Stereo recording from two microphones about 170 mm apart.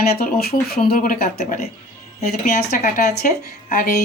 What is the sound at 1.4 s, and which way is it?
Speech, 40° left (ahead or behind).